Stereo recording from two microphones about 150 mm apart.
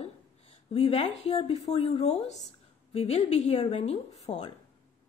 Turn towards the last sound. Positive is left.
turn(degrees=45)  # may be behind; listen again after turning